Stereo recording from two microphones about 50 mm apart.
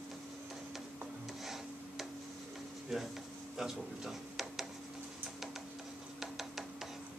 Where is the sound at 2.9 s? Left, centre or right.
Centre.